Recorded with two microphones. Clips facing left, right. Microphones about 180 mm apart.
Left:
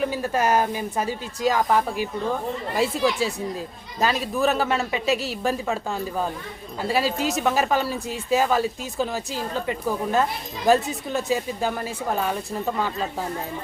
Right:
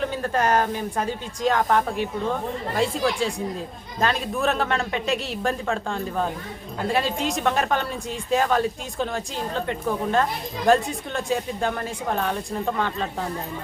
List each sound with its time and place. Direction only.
0.0 s a woman's voice: 10° left (ahead or behind)